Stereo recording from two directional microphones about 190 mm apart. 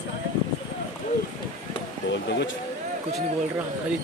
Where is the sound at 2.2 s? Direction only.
65° left (ahead or behind).